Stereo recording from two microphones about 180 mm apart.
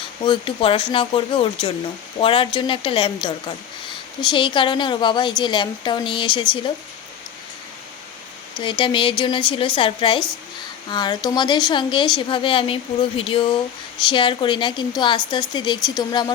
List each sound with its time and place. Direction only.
0.2 s a woman's voice: 30° left (ahead or behind)
8.5 s a woman's voice: 25° left (ahead or behind)